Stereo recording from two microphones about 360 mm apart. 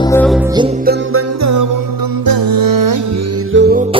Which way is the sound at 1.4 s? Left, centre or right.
Right.